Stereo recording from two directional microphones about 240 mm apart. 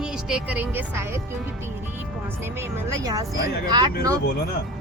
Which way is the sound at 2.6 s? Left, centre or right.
Centre.